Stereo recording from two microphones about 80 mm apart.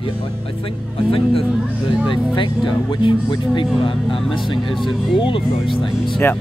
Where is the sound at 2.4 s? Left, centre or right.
Left.